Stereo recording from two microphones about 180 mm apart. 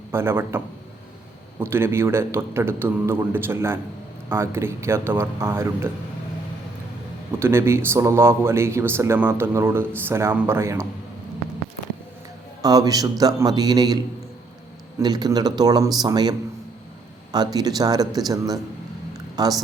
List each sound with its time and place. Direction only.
0.1 s a man's voice: 15° right (ahead or behind)
7.3 s a man's voice: 15° right (ahead or behind)
12.6 s a man's voice: 20° right (ahead or behind)
15.0 s a man's voice: 20° right (ahead or behind)
17.3 s a man's voice: 20° right (ahead or behind)